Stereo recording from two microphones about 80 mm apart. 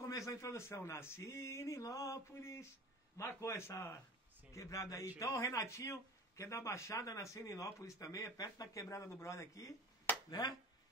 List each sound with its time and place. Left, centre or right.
0.0 s a man's voice: left